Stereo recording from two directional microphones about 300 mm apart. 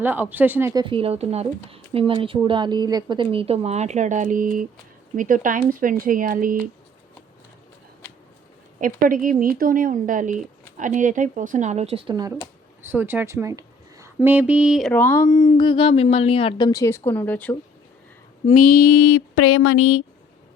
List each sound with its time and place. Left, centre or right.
0.0 s speech: centre; by 6.6 s right
8.8 s speech: right; by 17.6 s centre
18.4 s mantra: left
18.9 s a sound: left